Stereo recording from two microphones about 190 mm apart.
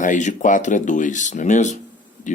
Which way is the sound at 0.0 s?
40° left (ahead or behind).